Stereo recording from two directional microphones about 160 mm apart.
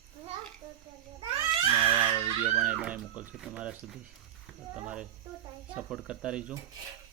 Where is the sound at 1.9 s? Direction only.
30° right (ahead or behind).